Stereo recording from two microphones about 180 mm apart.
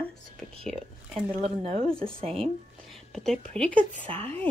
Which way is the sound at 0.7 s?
Centre (ahead or behind).